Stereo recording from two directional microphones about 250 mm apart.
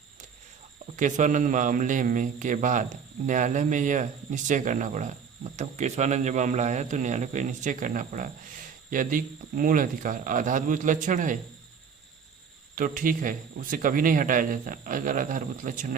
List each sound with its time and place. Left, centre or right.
0.9 s speech: right
12.7 s speech: right